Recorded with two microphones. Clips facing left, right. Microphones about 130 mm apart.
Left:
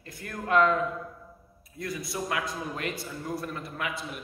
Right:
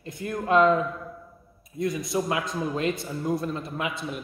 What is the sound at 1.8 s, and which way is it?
A man's voice, 20° right (ahead or behind).